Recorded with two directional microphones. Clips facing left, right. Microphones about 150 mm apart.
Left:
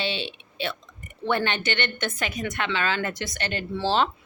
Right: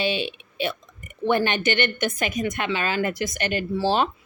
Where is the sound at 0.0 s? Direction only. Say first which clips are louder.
Right 5 dB; 10° right (ahead or behind).